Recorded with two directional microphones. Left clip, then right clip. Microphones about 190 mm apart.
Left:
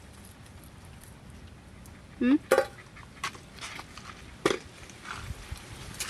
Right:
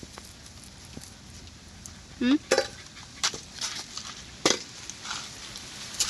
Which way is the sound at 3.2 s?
55° right (ahead or behind).